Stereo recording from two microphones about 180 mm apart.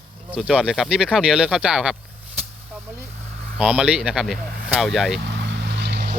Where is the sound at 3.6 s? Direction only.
5° right (ahead or behind).